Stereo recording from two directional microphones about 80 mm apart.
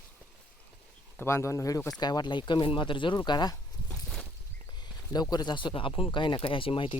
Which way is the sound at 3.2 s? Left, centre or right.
Left.